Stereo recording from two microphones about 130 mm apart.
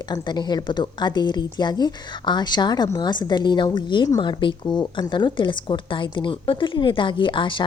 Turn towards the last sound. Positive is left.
turn(degrees=40)  # may be behind; listen again after turning